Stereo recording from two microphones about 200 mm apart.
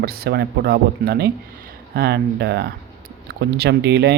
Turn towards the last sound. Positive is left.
turn(degrees=-55)  # may be behind; listen again after turning